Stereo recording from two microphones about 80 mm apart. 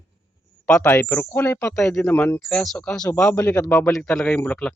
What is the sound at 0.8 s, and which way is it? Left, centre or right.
Speech, left.